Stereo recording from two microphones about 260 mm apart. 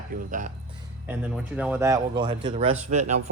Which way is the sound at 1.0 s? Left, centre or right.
Centre.